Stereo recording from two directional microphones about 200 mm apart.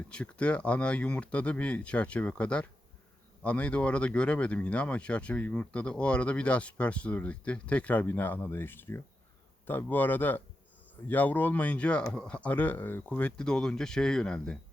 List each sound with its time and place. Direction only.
0.1 s speech: 5° left (ahead or behind)